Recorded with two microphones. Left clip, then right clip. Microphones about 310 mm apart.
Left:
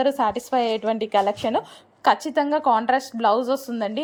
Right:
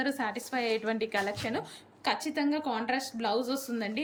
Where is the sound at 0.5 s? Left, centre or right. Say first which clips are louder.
Left 9 dB; left.